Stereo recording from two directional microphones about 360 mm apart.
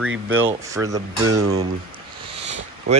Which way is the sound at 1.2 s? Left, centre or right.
Right.